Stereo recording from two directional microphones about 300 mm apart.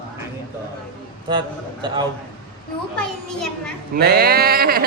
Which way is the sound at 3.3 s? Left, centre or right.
Centre.